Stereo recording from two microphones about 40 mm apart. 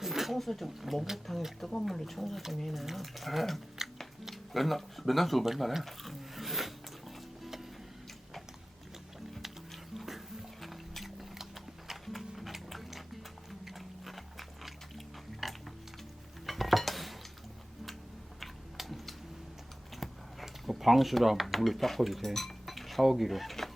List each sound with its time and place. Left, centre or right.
0.0 s a sound: centre
0.7 s speech: centre
3.8 s music: centre
4.3 s speech: centre
7.4 s music: centre
9.9 s music: centre
16.5 s cutlery: centre
18.3 s a sound: centre